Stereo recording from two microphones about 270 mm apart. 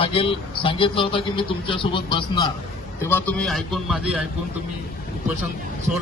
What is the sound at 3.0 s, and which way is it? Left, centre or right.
A man's voice, centre.